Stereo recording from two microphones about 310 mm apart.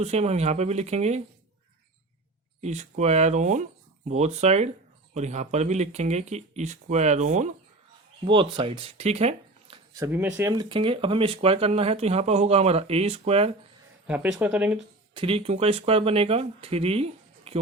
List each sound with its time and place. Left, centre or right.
0.0 s speech: right
2.6 s speech: right
14.3 s speech: centre
15.1 s speech: centre